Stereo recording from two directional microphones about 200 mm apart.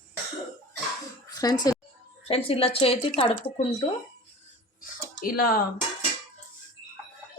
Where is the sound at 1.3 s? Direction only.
20° left (ahead or behind).